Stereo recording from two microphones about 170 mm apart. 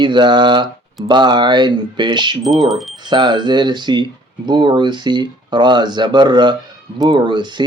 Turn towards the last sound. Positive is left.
turn(degrees=-25)  # may be behind; listen again after turning